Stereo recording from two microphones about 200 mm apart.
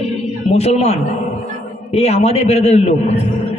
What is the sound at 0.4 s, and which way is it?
A man's voice, 30° left (ahead or behind).